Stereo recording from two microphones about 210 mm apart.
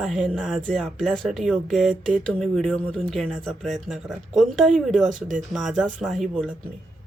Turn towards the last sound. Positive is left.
turn(degrees=0)  # may be behind; listen again after turning